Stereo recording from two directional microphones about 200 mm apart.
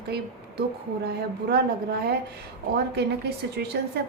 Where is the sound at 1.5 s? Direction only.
50° right (ahead or behind).